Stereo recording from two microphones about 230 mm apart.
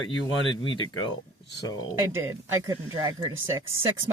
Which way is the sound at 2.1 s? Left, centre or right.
Centre.